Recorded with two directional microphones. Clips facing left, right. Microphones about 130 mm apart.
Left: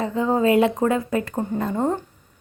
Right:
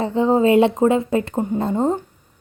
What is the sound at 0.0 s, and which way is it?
A woman's voice, 30° right (ahead or behind).